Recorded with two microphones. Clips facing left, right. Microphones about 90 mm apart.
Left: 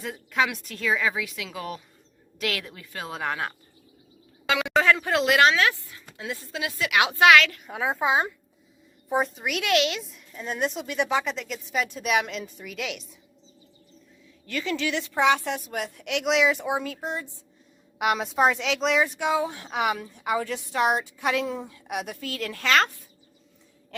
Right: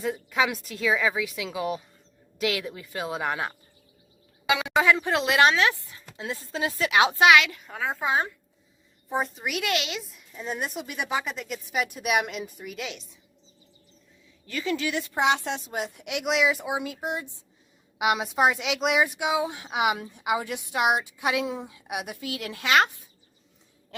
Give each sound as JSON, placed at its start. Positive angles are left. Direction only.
{"t": 0.0, "sound": "a woman's voice", "side_deg": -5}
{"t": 5.9, "sound": "a sound", "side_deg": -25}
{"t": 6.5, "sound": "speech", "side_deg": -30}
{"t": 7.7, "sound": "a woman's voice", "side_deg": 15}
{"t": 9.0, "sound": "a woman's voice", "side_deg": 0}
{"t": 14.4, "sound": "a woman's voice", "side_deg": -30}
{"t": 14.8, "sound": "speech", "side_deg": -10}
{"t": 18.0, "sound": "speech", "side_deg": -5}